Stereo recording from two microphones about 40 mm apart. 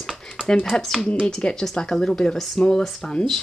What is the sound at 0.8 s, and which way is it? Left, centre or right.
Speech, centre.